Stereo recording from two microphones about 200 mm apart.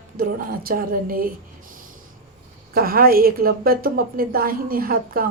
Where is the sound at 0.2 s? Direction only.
45° right (ahead or behind).